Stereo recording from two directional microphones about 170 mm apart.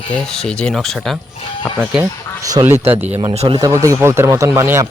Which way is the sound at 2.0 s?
20° right (ahead or behind).